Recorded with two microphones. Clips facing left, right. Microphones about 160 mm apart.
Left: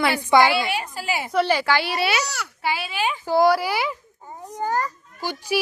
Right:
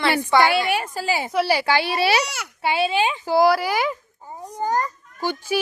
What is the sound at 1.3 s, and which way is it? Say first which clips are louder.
Speech: left 2 dB; 5° right (ahead or behind).